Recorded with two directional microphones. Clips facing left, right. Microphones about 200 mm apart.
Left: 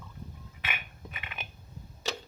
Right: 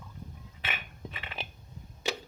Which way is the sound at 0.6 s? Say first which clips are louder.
Right 1 dB; 30° right (ahead or behind).